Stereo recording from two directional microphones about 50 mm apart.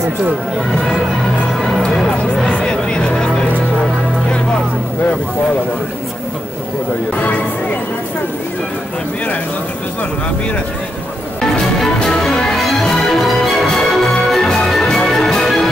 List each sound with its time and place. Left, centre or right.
2.0 s music: centre
11.4 s music: centre